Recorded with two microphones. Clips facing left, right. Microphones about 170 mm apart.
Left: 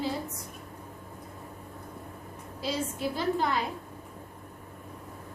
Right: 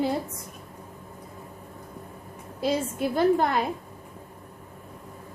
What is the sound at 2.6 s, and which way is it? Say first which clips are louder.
A woman's voice: right 6 dB; 55° right (ahead or behind).